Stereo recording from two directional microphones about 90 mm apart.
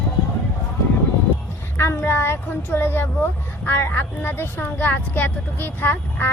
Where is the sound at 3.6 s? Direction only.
20° left (ahead or behind).